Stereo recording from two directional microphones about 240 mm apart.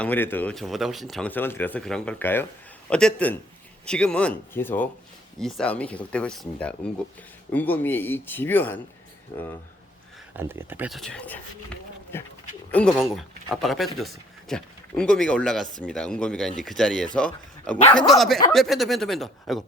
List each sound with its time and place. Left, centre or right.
0.0 s speech: centre
10.3 s speech: centre